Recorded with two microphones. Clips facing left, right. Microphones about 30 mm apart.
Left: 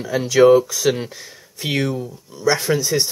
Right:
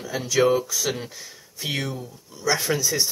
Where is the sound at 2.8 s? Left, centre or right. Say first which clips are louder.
Left 4 dB; left.